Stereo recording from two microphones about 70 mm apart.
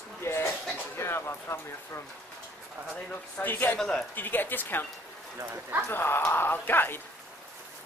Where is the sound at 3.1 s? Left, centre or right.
Left.